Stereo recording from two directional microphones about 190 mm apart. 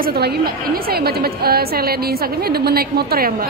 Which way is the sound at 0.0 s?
55° right (ahead or behind).